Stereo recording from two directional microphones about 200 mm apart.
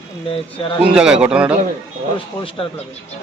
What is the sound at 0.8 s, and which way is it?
Speech, 5° right (ahead or behind).